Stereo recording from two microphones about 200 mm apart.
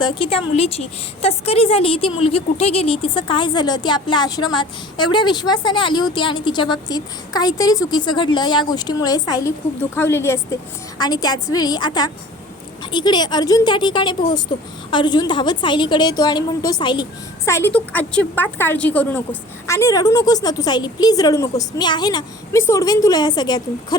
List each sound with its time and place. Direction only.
0.0 s a woman's voice: 25° left (ahead or behind)